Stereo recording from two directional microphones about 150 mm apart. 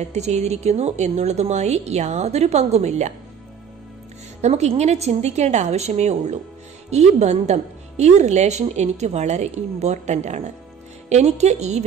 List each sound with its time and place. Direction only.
0.1 s speech: 50° right (ahead or behind)
4.4 s speech: 45° right (ahead or behind)